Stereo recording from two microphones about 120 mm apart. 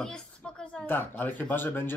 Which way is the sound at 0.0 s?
5° left (ahead or behind).